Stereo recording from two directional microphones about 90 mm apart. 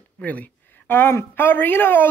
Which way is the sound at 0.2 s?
15° left (ahead or behind).